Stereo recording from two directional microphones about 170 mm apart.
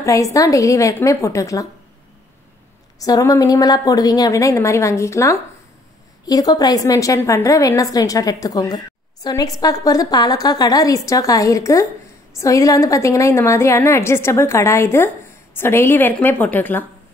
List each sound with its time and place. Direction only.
0.0 s a woman's voice: 20° left (ahead or behind)
3.0 s a woman's voice: 20° left (ahead or behind)